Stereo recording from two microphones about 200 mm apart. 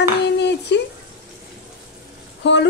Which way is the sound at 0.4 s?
60° left (ahead or behind).